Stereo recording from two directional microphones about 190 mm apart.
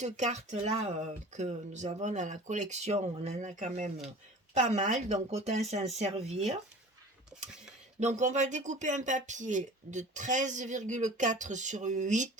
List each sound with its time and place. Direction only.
0.0 s speech: 40° right (ahead or behind)
7.9 s speech: 40° right (ahead or behind)